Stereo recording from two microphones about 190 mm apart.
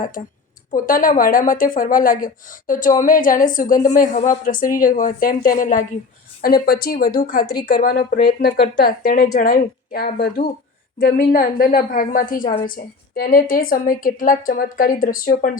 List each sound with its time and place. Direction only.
0.7 s speech: 45° left (ahead or behind)